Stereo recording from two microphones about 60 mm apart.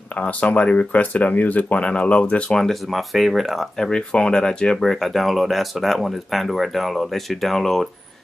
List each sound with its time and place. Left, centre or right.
0.2 s speech: left
2.5 s speech: centre
3.8 s speech: centre